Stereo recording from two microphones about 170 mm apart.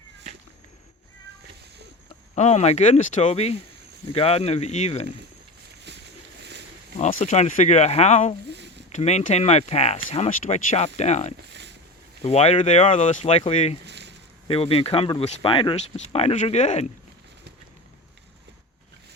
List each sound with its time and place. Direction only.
2.3 s speech: 40° left (ahead or behind)
7.0 s speech: 45° left (ahead or behind)
13.8 s a sound: 90° right
14.4 s speech: 35° left (ahead or behind)